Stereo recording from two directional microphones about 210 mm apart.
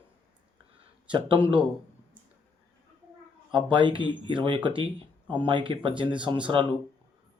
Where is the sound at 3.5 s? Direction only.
20° right (ahead or behind).